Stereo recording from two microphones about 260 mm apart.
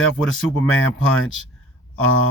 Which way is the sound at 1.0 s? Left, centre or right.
Left.